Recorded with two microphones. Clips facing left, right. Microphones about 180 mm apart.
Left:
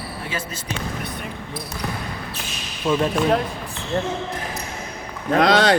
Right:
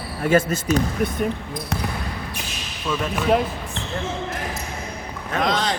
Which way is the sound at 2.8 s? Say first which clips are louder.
Left 5 dB; 30° left (ahead or behind).